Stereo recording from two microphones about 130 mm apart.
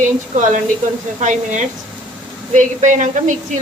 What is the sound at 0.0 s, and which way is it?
A woman's voice, 75° right (ahead or behind).